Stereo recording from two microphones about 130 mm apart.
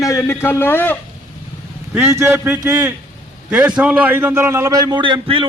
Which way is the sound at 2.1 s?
20° right (ahead or behind).